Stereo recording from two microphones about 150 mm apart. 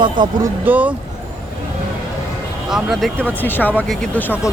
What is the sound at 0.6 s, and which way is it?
Speech, 10° right (ahead or behind).